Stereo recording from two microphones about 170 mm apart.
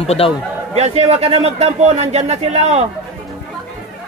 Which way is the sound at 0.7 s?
40° right (ahead or behind).